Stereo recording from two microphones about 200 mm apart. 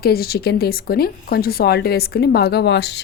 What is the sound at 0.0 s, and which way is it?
A woman's voice, 50° left (ahead or behind).